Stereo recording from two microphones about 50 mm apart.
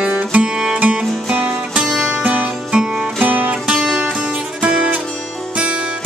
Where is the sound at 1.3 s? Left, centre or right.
Right.